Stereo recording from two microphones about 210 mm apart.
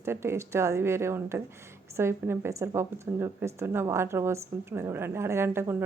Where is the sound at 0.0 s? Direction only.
10° right (ahead or behind).